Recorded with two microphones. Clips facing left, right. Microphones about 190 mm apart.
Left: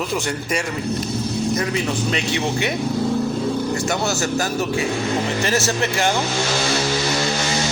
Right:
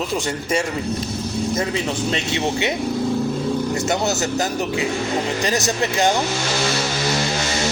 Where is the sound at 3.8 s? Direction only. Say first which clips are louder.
Right 1 dB; 20° right (ahead or behind).